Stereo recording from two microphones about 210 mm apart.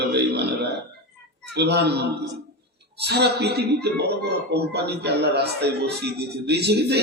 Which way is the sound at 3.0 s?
50° right (ahead or behind).